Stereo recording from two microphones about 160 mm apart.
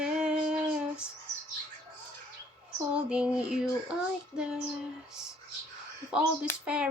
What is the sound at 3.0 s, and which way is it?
Female singing, 5° right (ahead or behind).